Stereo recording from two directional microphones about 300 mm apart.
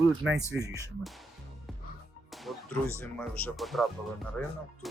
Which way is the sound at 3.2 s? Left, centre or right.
Centre.